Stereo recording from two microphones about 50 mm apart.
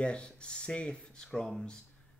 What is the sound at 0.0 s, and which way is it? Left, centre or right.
Speech, centre.